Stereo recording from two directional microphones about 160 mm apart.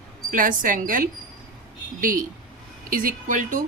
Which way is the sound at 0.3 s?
55° right (ahead or behind).